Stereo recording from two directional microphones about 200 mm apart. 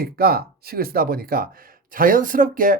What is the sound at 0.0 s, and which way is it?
Speech, 50° right (ahead or behind).